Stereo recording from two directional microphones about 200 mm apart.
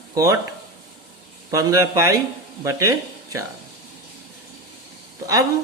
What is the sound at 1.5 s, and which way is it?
A man's voice, 15° right (ahead or behind).